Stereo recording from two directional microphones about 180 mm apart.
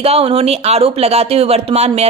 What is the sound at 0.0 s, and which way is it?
A woman's voice, 35° right (ahead or behind).